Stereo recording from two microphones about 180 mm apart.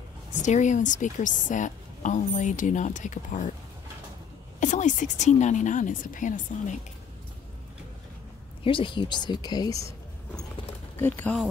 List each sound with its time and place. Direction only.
0.3 s a woman's voice: 40° left (ahead or behind)
4.6 s a woman's voice: 45° left (ahead or behind)
8.6 s speech: 30° left (ahead or behind)
11.0 s speech: 10° left (ahead or behind)